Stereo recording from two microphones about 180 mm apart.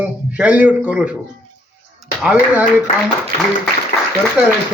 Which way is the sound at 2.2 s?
10° right (ahead or behind).